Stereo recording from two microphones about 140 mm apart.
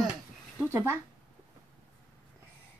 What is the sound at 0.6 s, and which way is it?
Speech, 15° right (ahead or behind).